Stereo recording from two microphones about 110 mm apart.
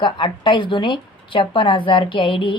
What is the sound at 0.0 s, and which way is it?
Speech, 45° left (ahead or behind).